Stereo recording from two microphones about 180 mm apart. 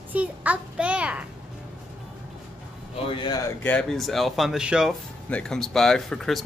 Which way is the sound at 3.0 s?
25° left (ahead or behind).